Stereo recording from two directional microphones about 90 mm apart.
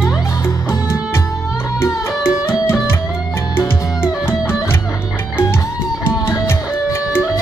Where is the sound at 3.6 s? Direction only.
25° left (ahead or behind).